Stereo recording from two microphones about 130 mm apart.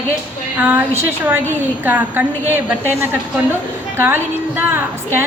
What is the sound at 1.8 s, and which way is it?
Speech, 15° right (ahead or behind).